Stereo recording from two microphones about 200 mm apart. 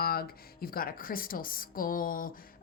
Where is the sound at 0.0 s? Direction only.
50° left (ahead or behind).